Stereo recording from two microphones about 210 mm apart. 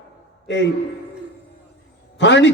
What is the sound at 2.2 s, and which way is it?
Speech, 55° left (ahead or behind).